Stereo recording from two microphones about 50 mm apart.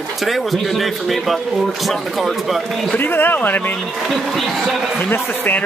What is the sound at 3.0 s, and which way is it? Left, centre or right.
Speech, left.